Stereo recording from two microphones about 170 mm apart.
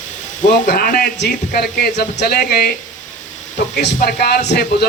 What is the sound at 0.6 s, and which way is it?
Speech, 55° left (ahead or behind).